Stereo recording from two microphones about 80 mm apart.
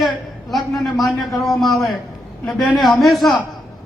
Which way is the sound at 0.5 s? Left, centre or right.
Centre.